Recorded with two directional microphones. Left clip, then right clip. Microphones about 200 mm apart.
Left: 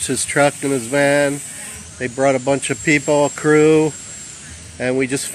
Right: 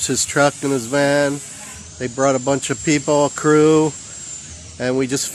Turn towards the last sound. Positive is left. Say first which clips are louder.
# left 1 dB
turn(degrees=-10)  # may be behind; listen again after turning